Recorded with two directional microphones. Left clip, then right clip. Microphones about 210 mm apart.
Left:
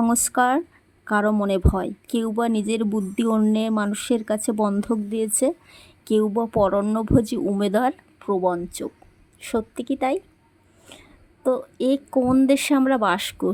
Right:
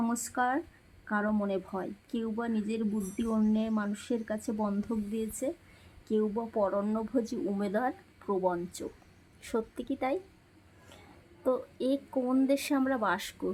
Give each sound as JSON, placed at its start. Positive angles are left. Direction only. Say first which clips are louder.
{"t": 0.0, "sound": "speech", "louder": "left 11 dB", "side_deg": 40}
{"t": 11.4, "sound": "speech", "louder": "left 9 dB", "side_deg": 30}